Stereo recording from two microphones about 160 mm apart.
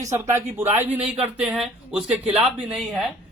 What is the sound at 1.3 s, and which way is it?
Speech, centre (ahead or behind).